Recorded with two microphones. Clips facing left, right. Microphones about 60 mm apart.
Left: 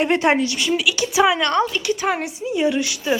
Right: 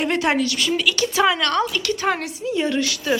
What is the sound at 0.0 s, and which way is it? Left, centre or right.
Speech, left.